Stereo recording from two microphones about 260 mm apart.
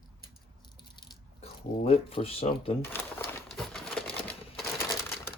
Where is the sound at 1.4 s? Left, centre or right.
Left.